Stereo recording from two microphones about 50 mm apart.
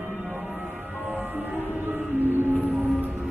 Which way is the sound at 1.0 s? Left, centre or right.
Right.